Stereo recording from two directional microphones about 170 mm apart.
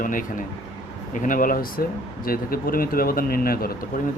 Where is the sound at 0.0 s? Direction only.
50° left (ahead or behind).